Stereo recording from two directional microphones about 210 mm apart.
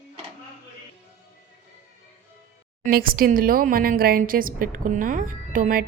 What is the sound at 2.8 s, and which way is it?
Speech, 45° right (ahead or behind).